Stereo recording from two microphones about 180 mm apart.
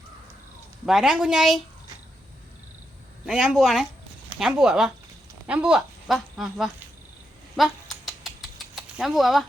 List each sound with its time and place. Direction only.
0.9 s speech: centre (ahead or behind)
3.2 s speech: 5° right (ahead or behind)
7.5 s mechanisms: centre (ahead or behind)